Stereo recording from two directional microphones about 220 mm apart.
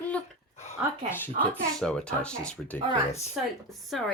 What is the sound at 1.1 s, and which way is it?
Speech, 10° left (ahead or behind).